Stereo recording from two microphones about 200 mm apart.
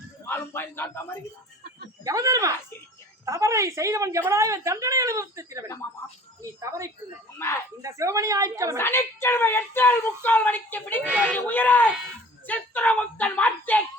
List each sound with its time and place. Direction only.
0.3 s a sound: 10° left (ahead or behind)
2.0 s a woman's voice: 15° right (ahead or behind)
7.3 s speech: 15° left (ahead or behind)
7.8 s a woman's voice: 15° right (ahead or behind)
8.8 s speech: 10° left (ahead or behind)